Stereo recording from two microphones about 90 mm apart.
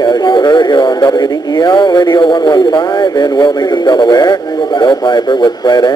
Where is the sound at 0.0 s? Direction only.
50° left (ahead or behind).